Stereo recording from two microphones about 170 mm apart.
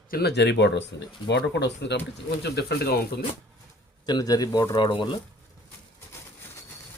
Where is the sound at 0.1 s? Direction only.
70° left (ahead or behind); by 2.0 s 90° left.